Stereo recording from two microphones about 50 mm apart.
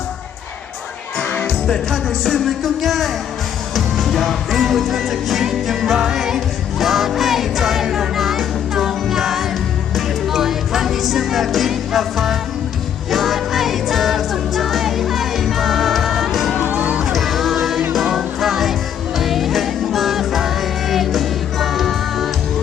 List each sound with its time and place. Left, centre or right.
1.6 s music: centre
16.6 s music: right
17.0 s music: centre